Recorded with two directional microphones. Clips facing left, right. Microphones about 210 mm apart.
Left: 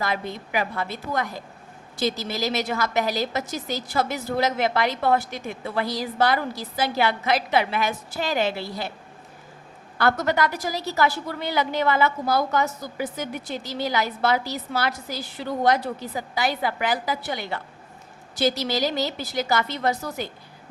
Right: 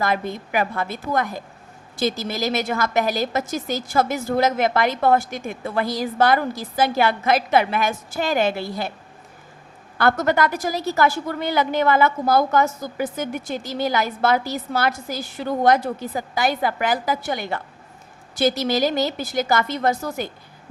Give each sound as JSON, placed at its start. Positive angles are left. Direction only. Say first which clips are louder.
{"t": 0.0, "sound": "a woman's voice", "louder": "right 4 dB", "side_deg": -50}
{"t": 10.0, "sound": "a woman's voice", "louder": "right 3 dB", "side_deg": -50}